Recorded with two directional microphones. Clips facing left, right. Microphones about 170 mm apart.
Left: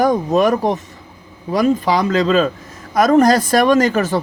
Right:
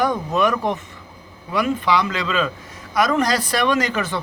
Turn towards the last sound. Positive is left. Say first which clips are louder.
# left 7 dB
turn(degrees=45)  # may be behind; listen again after turning